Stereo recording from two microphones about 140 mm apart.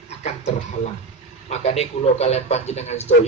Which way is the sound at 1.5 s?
50° left (ahead or behind).